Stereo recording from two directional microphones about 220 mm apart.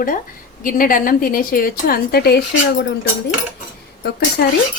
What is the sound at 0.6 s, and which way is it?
A woman's voice, 40° left (ahead or behind).